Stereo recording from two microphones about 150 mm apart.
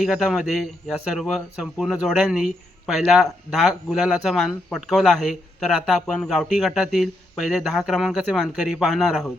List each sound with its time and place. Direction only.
0.0 s a man's voice: 5° right (ahead or behind)